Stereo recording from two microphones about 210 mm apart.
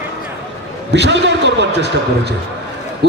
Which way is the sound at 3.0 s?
50° right (ahead or behind).